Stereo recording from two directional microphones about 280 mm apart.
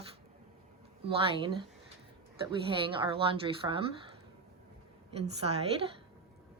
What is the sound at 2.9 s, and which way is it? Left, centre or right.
Speech, centre.